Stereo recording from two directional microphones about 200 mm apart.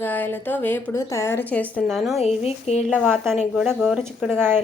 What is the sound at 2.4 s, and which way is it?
Speech, 30° left (ahead or behind).